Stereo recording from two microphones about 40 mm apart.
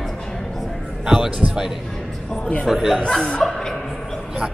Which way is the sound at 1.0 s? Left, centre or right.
Centre.